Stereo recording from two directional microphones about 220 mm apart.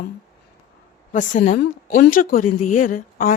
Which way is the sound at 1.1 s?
35° left (ahead or behind).